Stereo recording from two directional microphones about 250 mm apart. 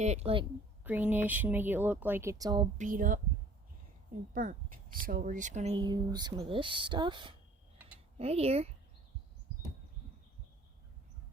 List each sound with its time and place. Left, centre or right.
0.0 s speech: right
0.9 s speech: centre
2.7 s speech: right